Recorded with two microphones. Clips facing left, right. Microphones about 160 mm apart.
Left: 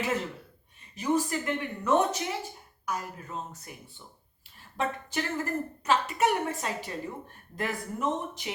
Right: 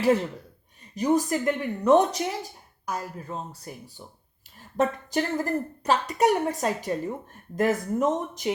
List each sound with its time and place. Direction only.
0.9 s speech: 40° right (ahead or behind)